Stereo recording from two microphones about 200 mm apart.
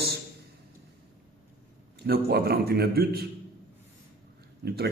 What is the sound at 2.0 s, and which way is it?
A man's voice, 50° right (ahead or behind).